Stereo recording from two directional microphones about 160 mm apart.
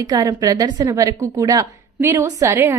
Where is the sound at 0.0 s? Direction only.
25° right (ahead or behind).